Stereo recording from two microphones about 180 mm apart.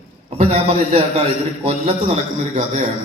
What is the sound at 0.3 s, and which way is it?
A man's voice, 35° right (ahead or behind).